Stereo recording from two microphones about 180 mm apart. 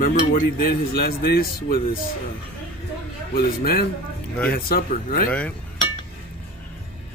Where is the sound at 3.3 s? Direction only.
55° left (ahead or behind).